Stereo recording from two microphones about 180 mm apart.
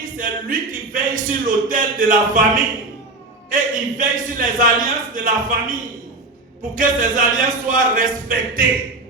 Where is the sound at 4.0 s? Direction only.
50° right (ahead or behind).